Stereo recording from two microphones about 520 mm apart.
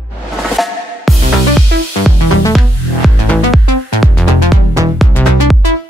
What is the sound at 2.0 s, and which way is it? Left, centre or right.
Music, centre.